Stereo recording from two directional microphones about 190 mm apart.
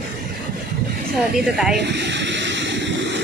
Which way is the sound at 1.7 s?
65° right (ahead or behind).